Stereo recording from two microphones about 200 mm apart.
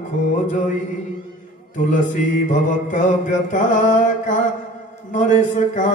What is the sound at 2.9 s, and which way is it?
Mantra, 40° left (ahead or behind).